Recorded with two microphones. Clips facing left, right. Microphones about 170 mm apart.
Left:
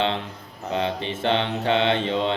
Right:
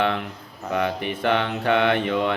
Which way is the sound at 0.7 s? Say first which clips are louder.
Right 1 dB; 25° left (ahead or behind).